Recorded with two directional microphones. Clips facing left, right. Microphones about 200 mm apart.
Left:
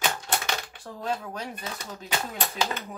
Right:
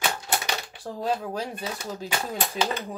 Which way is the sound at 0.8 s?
30° right (ahead or behind).